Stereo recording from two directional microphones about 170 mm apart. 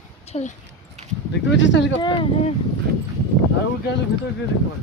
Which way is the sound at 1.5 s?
90° left.